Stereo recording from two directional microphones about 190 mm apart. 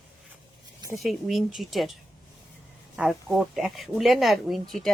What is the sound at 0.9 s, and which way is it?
Speech, centre (ahead or behind).